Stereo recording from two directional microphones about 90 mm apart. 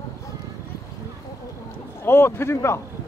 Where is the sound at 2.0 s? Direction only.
25° left (ahead or behind).